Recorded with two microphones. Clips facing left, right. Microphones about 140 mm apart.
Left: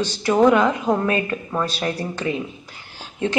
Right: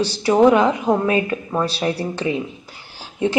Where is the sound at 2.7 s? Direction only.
10° right (ahead or behind).